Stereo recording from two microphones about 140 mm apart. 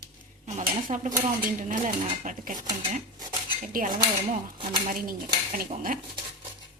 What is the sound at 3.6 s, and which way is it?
Speech, 75° right (ahead or behind).